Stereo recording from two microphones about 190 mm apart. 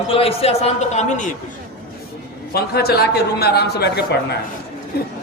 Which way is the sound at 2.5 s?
55° left (ahead or behind).